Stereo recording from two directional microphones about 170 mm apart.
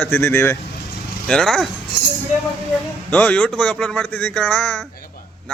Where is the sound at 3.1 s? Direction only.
10° left (ahead or behind).